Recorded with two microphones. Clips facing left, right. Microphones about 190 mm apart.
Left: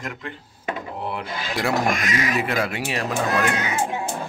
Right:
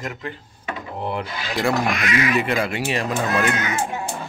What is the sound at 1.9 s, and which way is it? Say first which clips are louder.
Speech: right 2 dB; 45° left (ahead or behind).